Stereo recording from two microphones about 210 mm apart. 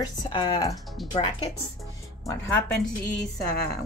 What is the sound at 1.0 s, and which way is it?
Speech, centre (ahead or behind).